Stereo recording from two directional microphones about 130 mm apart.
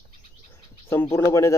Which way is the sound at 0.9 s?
20° left (ahead or behind).